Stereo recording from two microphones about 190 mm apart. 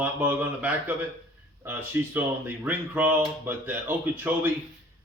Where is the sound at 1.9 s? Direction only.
10° right (ahead or behind).